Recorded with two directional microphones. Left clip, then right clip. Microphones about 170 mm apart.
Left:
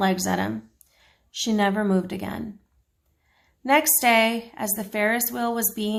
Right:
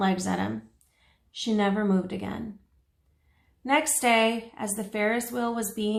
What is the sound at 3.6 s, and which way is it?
A woman's voice, 35° left (ahead or behind).